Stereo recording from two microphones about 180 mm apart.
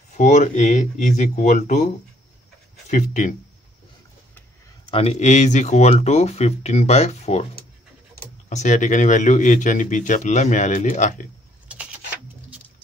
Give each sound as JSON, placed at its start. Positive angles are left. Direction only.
{"t": 0.2, "sound": "speech", "side_deg": 40}
{"t": 2.9, "sound": "speech", "side_deg": 45}
{"t": 4.8, "sound": "speech", "side_deg": 35}
{"t": 8.5, "sound": "speech", "side_deg": 40}